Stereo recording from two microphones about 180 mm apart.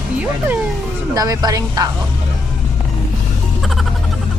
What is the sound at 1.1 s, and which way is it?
Speech, 20° right (ahead or behind).